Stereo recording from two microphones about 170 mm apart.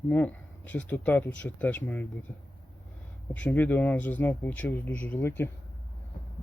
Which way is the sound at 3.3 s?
10° left (ahead or behind).